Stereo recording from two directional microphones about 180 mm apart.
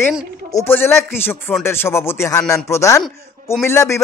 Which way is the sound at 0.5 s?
15° left (ahead or behind).